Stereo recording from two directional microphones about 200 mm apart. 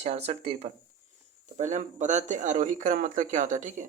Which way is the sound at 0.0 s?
30° right (ahead or behind).